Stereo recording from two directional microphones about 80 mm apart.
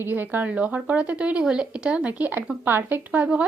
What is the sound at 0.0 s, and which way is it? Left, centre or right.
Speech, right.